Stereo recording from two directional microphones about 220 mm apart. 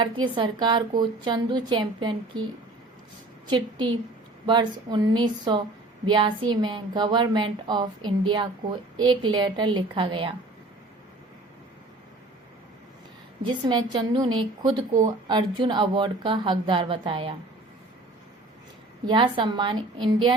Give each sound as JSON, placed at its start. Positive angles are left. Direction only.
{"t": 0.0, "sound": "a woman's voice", "side_deg": -20}
{"t": 3.5, "sound": "a woman's voice", "side_deg": -20}
{"t": 13.4, "sound": "a woman's voice", "side_deg": -20}
{"t": 19.0, "sound": "a woman's voice", "side_deg": -20}